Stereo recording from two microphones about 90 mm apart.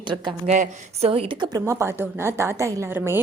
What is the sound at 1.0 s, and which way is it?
Speech, 90° right.